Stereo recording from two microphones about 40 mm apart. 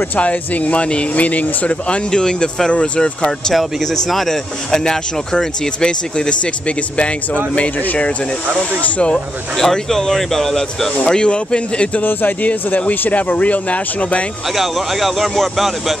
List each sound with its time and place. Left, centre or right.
0.1 s speech: left
1.9 s speech: left
3.5 s speech: centre
7.5 s speech: left
9.6 s speech: centre
11.1 s speech: left
12.0 s speech: left
12.4 s speech: left
14.5 s speech: centre